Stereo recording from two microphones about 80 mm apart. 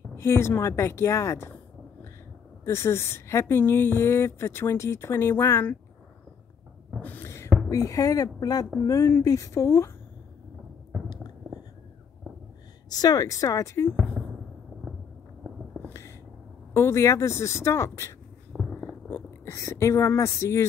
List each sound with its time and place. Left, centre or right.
0.1 s a woman's voice: left
2.6 s a woman's voice: left
7.0 s a sound: left
7.7 s a woman's voice: left
12.9 s speech: left
15.5 s a sound: centre
16.7 s a woman's voice: left
18.5 s a sound: centre
19.0 s speech: left